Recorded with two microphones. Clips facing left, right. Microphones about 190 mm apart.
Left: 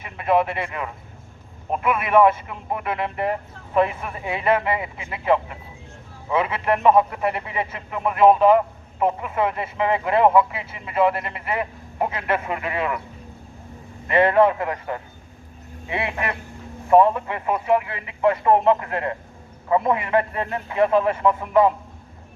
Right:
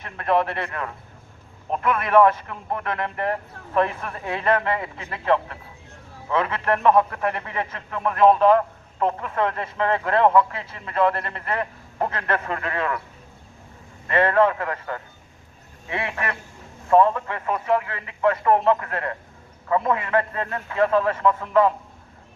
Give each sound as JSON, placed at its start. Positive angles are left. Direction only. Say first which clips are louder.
{"t": 0.0, "sound": "a man's voice", "louder": "left 2 dB", "side_deg": 5}
{"t": 14.1, "sound": "a man's voice", "louder": "left 2 dB", "side_deg": 15}